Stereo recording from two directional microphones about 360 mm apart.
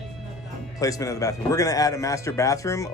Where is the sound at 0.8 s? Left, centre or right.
Centre.